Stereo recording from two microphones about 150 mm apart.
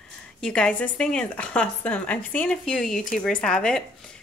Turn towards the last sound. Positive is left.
turn(degrees=5)  # may be behind; listen again after turning